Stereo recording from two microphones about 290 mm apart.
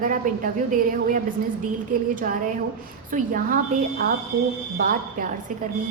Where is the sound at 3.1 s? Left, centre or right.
Right.